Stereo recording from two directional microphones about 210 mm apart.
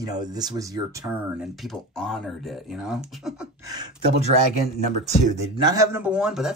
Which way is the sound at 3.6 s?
20° right (ahead or behind).